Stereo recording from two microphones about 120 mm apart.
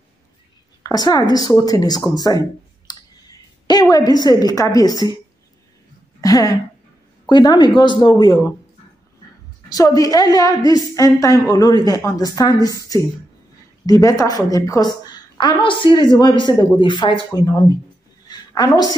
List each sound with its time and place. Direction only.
0.8 s a woman's voice: 35° left (ahead or behind)
2.9 s clicking: 35° left (ahead or behind)
3.9 s a woman's voice: 35° left (ahead or behind)
6.2 s a woman's voice: 30° left (ahead or behind)
9.7 s a woman's voice: 30° left (ahead or behind)
13.8 s a woman's voice: 30° left (ahead or behind)
18.5 s a woman's voice: 35° left (ahead or behind)